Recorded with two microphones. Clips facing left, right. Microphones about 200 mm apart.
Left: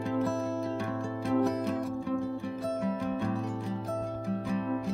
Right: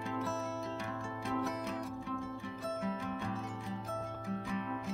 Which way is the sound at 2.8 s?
40° left (ahead or behind).